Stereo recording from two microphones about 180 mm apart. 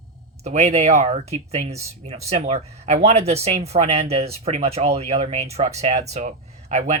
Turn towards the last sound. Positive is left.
turn(degrees=-40)  # may be behind; listen again after turning